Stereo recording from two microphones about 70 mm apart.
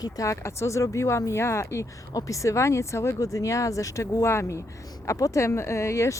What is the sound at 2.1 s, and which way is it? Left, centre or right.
Speech, left.